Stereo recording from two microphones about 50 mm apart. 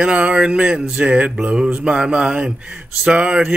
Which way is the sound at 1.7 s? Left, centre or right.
Centre.